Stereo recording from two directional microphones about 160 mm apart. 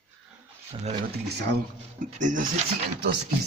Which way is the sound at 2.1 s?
50° right (ahead or behind).